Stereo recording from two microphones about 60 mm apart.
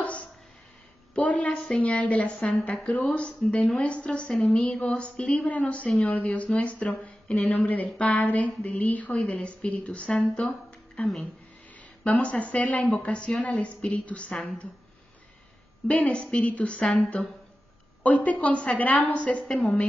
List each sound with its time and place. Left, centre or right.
0.0 s a sound: left
1.1 s a woman's voice: left
15.9 s a woman's voice: centre